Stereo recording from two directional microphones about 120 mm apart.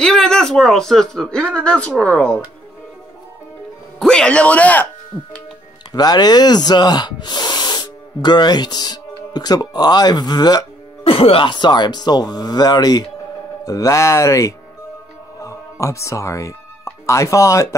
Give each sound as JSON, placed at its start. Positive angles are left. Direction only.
{"t": 0.0, "sound": "speech", "side_deg": 5}
{"t": 4.0, "sound": "speech", "side_deg": 5}
{"t": 5.1, "sound": "speech", "side_deg": 0}
{"t": 5.9, "sound": "speech", "side_deg": 35}
{"t": 11.1, "sound": "speech", "side_deg": 50}